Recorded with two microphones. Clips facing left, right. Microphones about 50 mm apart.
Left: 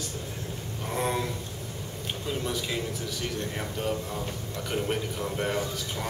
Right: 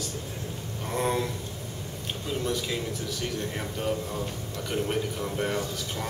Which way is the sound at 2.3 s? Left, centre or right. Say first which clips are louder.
Right 2 dB; centre.